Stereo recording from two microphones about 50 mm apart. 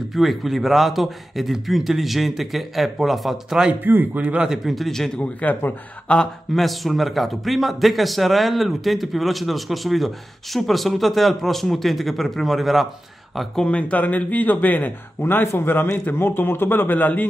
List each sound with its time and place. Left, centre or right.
0.1 s speech: centre
3.8 s a man's voice: right
4.2 s speech: right
4.5 s speech: centre
5.2 s speech: left
6.1 s speech: left
6.5 s speech: centre
13.7 s speech: left